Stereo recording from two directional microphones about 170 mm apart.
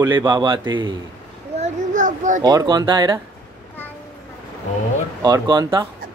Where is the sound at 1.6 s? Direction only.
50° right (ahead or behind).